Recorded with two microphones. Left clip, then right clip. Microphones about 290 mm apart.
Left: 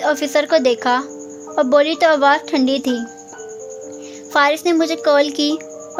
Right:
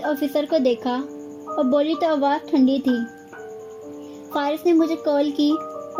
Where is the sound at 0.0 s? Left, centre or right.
Left.